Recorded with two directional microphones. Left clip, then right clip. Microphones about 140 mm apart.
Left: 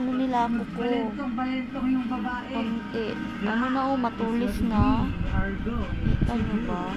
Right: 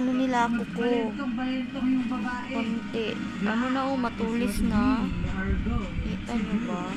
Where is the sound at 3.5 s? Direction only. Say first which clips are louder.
Left 2 dB; 20° left (ahead or behind).